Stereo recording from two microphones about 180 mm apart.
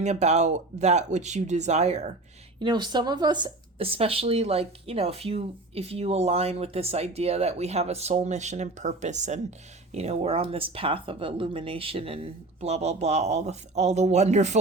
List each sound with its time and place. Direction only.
0.0 s speech: 40° right (ahead or behind)
2.6 s speech: 25° right (ahead or behind)